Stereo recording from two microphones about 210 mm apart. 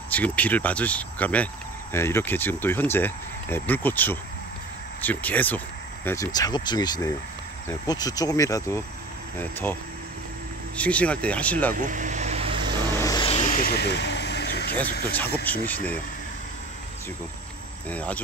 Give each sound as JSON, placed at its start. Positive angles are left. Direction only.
{"t": 0.1, "sound": "speech", "side_deg": 5}
{"t": 10.8, "sound": "speech", "side_deg": 5}
{"t": 11.7, "sound": "vehicle", "side_deg": -40}
{"t": 12.9, "sound": "vehicle", "side_deg": 15}
{"t": 13.6, "sound": "vehicle", "side_deg": 50}
{"t": 15.5, "sound": "speech", "side_deg": 5}
{"t": 17.8, "sound": "speech", "side_deg": 5}